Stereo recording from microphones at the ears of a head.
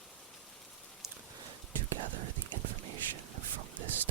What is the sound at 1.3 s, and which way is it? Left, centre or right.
Whispering, right.